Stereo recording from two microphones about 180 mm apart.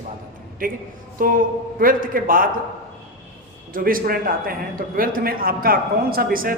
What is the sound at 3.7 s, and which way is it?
A man's voice, 50° right (ahead or behind).